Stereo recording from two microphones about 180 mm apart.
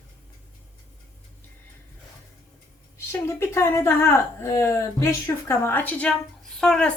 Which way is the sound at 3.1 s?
15° left (ahead or behind).